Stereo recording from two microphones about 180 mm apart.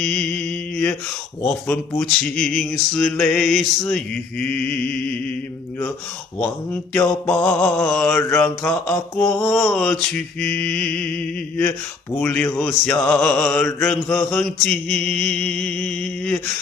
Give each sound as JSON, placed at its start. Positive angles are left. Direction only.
{"t": 0.0, "sound": "mantra", "side_deg": 5}
{"t": 1.5, "sound": "speech", "side_deg": 5}
{"t": 6.4, "sound": "mantra", "side_deg": 10}
{"t": 9.5, "sound": "speech", "side_deg": 5}
{"t": 12.2, "sound": "mantra", "side_deg": 5}
{"t": 12.5, "sound": "speech", "side_deg": 10}
{"t": 13.7, "sound": "mantra", "side_deg": 5}